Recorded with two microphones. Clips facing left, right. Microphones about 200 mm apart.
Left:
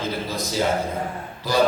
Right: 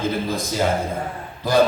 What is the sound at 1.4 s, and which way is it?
Speech, 50° right (ahead or behind).